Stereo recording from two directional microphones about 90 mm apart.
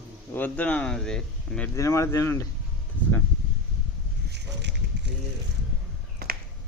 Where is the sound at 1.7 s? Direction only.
35° left (ahead or behind).